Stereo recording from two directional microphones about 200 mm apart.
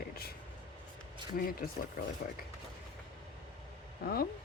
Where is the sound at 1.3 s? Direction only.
45° left (ahead or behind).